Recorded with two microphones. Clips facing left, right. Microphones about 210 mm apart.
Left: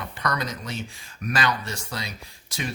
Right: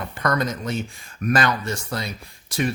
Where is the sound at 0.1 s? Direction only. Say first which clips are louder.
Right 6 dB; 50° right (ahead or behind).